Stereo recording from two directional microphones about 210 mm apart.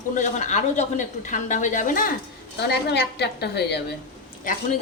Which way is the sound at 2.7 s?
50° left (ahead or behind).